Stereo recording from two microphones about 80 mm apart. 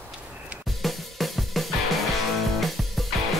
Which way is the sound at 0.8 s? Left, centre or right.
Centre.